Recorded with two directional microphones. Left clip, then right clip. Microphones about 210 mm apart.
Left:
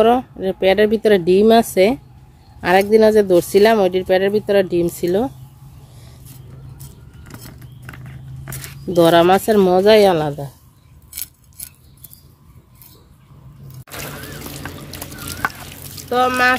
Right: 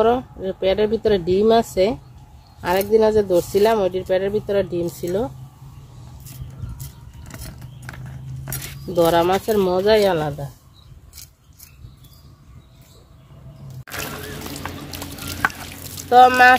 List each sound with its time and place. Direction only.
0.0 s speech: 35° left (ahead or behind)
8.8 s speech: 50° left (ahead or behind)
16.0 s speech: 15° left (ahead or behind)